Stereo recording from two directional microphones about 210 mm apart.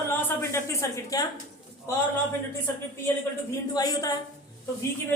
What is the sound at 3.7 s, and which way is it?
Speech, 15° left (ahead or behind).